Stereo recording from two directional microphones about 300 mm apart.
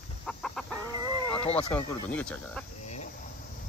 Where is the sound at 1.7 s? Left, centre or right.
Centre.